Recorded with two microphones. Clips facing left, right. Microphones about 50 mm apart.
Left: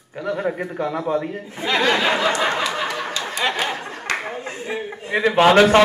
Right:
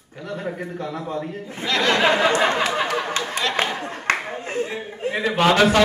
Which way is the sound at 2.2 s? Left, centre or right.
Right.